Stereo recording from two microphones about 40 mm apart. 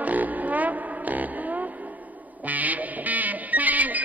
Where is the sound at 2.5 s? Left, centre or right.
Right.